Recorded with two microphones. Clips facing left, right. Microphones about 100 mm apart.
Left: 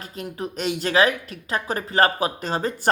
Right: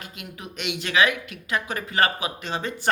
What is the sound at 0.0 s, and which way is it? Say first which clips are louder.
Speech: left 8 dB; 35° left (ahead or behind).